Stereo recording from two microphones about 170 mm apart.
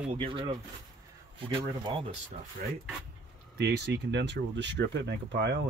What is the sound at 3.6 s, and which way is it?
Speech, 75° right (ahead or behind).